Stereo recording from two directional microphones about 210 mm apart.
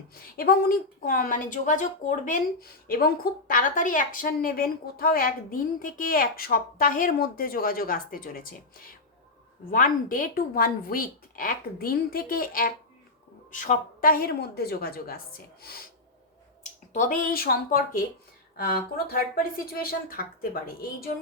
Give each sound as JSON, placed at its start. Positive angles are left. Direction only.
{"t": 0.1, "sound": "a woman's voice", "side_deg": 45}
{"t": 9.7, "sound": "a woman's voice", "side_deg": 40}
{"t": 16.9, "sound": "a woman's voice", "side_deg": 40}